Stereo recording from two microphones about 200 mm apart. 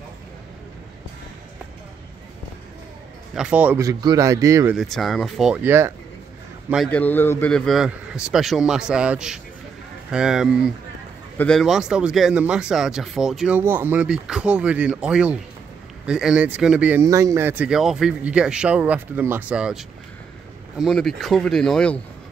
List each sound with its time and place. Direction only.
3.3 s speech: 5° right (ahead or behind)
4.7 s speech: centre (ahead or behind)
6.7 s speech: 5° left (ahead or behind)